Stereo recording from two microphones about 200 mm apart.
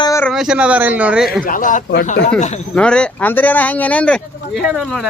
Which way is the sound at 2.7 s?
5° left (ahead or behind).